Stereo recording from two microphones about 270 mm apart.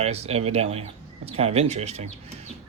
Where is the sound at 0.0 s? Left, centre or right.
Right.